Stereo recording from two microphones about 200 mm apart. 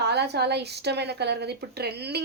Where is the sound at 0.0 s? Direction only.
55° right (ahead or behind).